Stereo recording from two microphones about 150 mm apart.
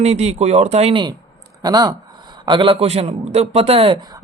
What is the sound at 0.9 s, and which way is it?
A man's voice, 30° right (ahead or behind).